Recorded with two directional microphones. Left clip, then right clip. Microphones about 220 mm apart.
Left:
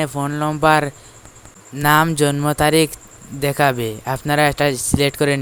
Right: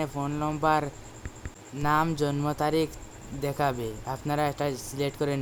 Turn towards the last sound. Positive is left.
turn(degrees=30)  # may be behind; listen again after turning